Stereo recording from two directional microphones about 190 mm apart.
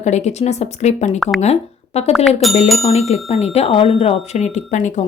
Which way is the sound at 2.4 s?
Centre (ahead or behind).